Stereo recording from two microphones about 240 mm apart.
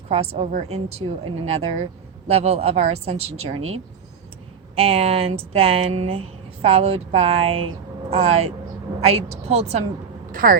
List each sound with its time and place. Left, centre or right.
0.3 s speech: right